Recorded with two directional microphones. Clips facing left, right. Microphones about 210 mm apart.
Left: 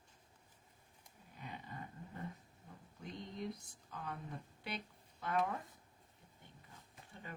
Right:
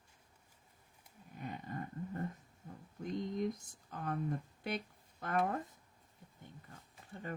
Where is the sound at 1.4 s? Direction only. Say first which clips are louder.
Right 7 dB; 50° right (ahead or behind).